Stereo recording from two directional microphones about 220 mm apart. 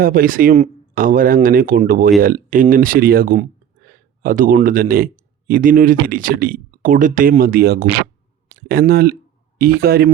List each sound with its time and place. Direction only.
0.0 s speech: 40° right (ahead or behind)